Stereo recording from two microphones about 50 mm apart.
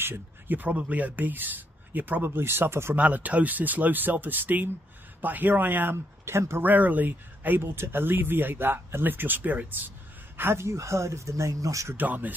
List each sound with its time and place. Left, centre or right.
0.0 s speech: right
3.0 s speech: right
6.2 s speech: right
6.6 s speech: right
7.7 s speech: right
10.6 s speech: right
12.0 s speech: right